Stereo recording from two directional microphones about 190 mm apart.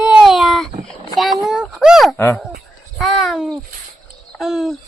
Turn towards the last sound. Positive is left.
turn(degrees=0)  # may be behind; listen again after turning